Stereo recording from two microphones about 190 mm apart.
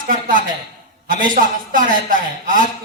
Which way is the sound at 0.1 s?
45° right (ahead or behind).